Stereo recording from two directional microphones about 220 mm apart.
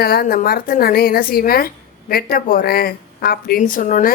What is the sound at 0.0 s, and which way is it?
A woman's voice, 45° left (ahead or behind).